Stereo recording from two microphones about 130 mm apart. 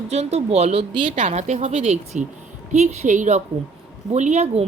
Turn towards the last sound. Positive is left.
turn(degrees=-60)  # may be behind; listen again after turning